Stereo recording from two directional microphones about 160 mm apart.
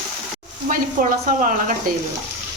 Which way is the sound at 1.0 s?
55° right (ahead or behind).